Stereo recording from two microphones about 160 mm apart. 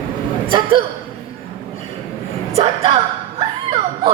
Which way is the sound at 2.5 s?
35° right (ahead or behind).